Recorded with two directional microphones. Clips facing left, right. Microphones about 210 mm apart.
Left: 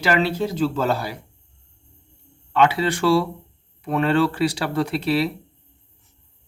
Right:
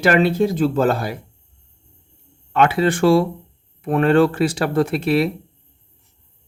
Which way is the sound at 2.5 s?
50° right (ahead or behind).